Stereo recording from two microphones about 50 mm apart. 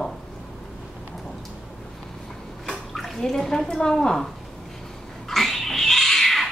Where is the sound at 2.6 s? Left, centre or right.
Centre.